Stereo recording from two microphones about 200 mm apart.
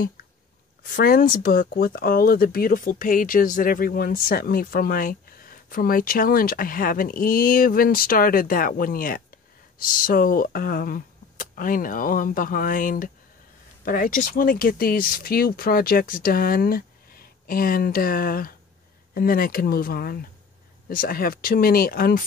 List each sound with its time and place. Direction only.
0.8 s speech: 45° left (ahead or behind)